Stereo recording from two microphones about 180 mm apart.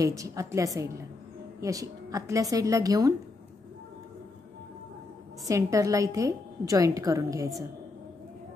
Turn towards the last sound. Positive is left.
turn(degrees=-20)  # may be behind; listen again after turning